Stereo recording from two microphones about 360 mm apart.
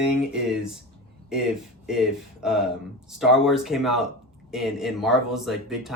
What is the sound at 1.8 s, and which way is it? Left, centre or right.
Speech, centre.